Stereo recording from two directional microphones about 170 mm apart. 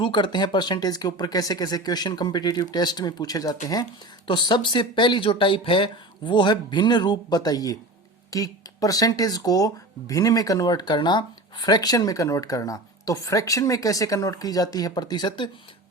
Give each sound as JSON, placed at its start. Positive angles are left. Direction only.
{"t": 0.0, "sound": "speech", "side_deg": 30}